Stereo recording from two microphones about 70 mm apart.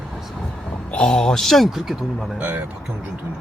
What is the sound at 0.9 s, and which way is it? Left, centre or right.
A man's voice, centre.